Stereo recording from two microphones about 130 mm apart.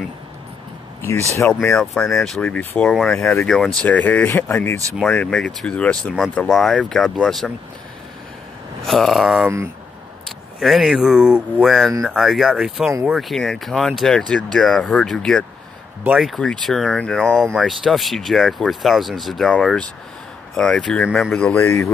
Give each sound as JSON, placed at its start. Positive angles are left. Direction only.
{"t": 1.8, "sound": "speech", "side_deg": 5}
{"t": 3.2, "sound": "speech", "side_deg": 20}
{"t": 3.4, "sound": "speech", "side_deg": 5}
{"t": 8.8, "sound": "speech", "side_deg": 0}
{"t": 21.5, "sound": "speech", "side_deg": 20}